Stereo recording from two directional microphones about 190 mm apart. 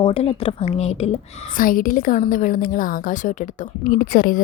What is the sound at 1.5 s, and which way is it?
Speech, 45° left (ahead or behind).